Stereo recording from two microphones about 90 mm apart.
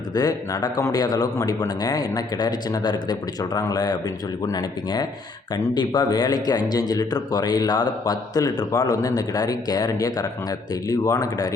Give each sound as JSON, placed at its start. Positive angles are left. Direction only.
{"t": 0.1, "sound": "a man's voice", "side_deg": 45}